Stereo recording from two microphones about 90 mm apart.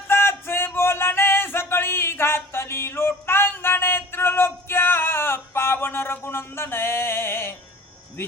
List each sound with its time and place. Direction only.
0.1 s music: 30° left (ahead or behind)